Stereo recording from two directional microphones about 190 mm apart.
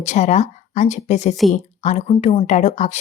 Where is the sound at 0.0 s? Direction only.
35° left (ahead or behind).